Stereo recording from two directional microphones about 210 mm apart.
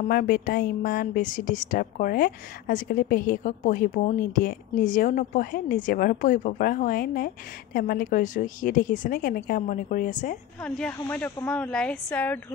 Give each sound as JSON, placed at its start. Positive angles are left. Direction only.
{"t": 0.1, "sound": "a woman's voice", "side_deg": 45}
{"t": 10.6, "sound": "speech", "side_deg": 5}